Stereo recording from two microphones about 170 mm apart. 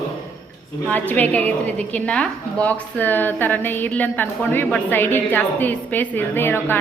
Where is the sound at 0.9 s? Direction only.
10° left (ahead or behind).